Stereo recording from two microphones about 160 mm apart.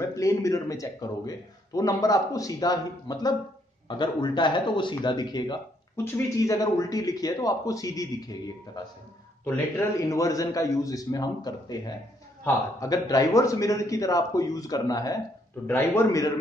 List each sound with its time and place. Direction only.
0.1 s speech: 20° left (ahead or behind)
9.9 s a man's voice: 20° left (ahead or behind)